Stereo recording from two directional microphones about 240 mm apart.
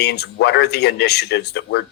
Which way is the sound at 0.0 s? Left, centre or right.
Left.